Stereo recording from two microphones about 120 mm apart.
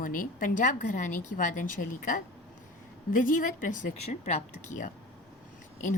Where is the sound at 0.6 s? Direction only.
90° left.